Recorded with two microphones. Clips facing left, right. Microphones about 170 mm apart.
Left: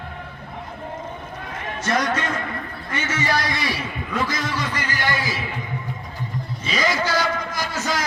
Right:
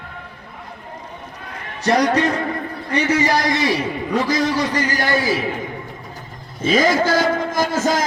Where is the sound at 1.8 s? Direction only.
40° right (ahead or behind).